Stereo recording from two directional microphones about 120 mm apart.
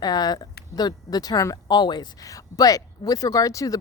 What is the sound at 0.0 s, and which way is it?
Speech, 35° left (ahead or behind).